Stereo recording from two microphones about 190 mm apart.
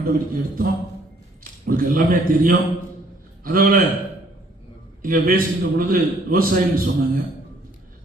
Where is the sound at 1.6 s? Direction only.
50° right (ahead or behind).